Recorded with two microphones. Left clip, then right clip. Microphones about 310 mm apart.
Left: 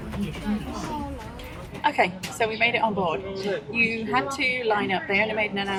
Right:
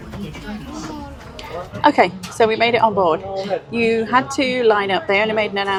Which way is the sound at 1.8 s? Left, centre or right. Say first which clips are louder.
Right 8 dB; right.